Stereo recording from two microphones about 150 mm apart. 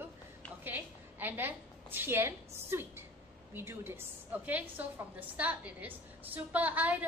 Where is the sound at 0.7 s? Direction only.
10° right (ahead or behind).